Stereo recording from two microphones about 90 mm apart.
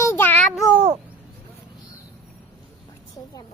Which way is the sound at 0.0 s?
25° left (ahead or behind).